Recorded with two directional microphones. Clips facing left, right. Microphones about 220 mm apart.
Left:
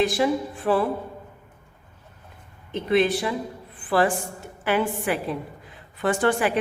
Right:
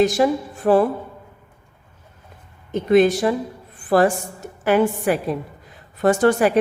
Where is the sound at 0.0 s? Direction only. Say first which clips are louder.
Right 4 dB; 45° right (ahead or behind).